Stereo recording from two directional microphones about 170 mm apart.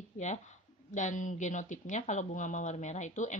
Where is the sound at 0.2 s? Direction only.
45° left (ahead or behind).